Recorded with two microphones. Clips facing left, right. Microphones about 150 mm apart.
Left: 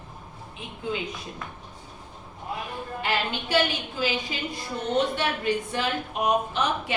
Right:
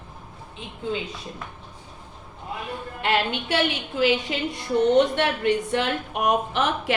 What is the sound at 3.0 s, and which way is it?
A woman's voice, 65° right (ahead or behind).